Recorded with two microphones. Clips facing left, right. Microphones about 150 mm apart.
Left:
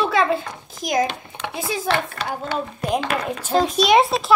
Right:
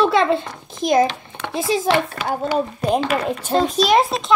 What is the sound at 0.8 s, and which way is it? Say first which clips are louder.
Speech: right 5 dB; 25° right (ahead or behind).